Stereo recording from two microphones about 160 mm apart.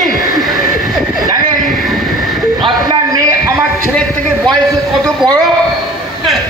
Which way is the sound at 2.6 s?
25° right (ahead or behind).